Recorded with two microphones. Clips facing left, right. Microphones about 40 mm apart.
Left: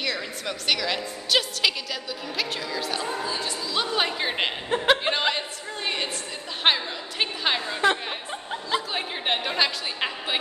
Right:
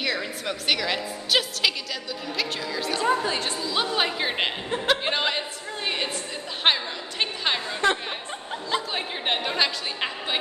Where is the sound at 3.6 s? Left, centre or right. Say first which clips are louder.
Left 2 dB; centre.